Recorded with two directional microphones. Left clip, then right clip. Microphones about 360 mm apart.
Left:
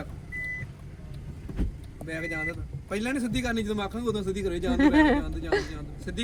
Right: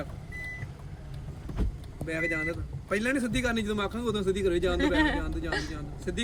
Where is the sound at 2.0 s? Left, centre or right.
Centre.